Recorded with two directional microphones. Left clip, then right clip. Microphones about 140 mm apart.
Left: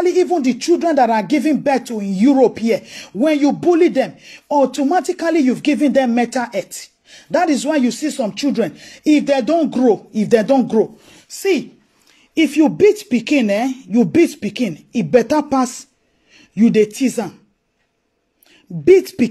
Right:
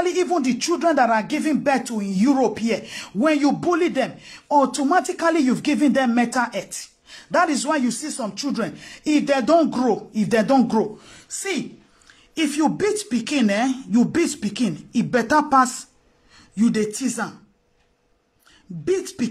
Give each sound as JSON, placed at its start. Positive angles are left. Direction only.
{"t": 0.0, "sound": "speech", "side_deg": 30}
{"t": 11.3, "sound": "speech", "side_deg": 35}
{"t": 12.4, "sound": "speech", "side_deg": 25}
{"t": 18.9, "sound": "speech", "side_deg": 30}